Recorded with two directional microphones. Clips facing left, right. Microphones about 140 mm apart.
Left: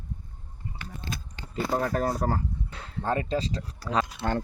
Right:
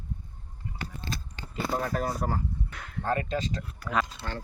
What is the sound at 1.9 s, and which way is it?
Speech, 45° left (ahead or behind).